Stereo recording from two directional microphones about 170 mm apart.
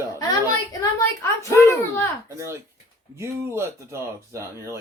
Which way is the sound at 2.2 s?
15° right (ahead or behind).